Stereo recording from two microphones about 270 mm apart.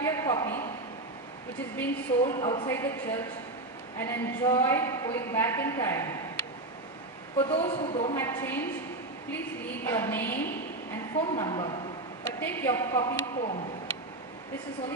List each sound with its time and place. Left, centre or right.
0.0 s a sound: centre
1.8 s a woman's voice: centre
7.4 s a man's voice: left
9.8 s a woman's voice: centre